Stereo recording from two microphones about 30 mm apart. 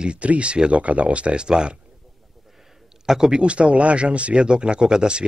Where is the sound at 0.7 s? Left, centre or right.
Right.